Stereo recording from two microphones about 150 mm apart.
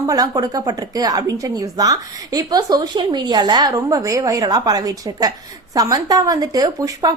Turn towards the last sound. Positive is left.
turn(degrees=-25)  # may be behind; listen again after turning